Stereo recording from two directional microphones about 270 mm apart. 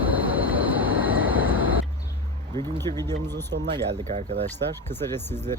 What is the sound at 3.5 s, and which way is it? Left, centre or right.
Speech, right.